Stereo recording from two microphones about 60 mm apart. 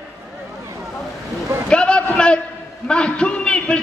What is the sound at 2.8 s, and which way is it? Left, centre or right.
Speech, centre.